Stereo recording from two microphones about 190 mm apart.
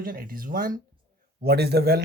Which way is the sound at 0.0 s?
50° right (ahead or behind).